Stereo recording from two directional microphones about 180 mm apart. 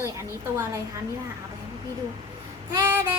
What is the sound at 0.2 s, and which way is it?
Speech, 15° right (ahead or behind).